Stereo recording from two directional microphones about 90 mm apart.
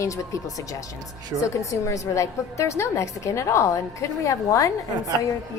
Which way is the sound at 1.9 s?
35° left (ahead or behind).